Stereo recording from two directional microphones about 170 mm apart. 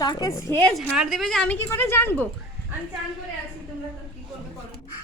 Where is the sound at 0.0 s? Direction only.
20° left (ahead or behind).